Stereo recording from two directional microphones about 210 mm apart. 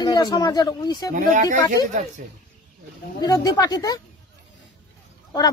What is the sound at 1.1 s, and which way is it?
Speech, 35° right (ahead or behind).